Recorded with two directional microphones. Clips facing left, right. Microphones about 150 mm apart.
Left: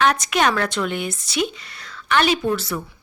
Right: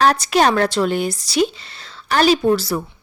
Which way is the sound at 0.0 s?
35° right (ahead or behind).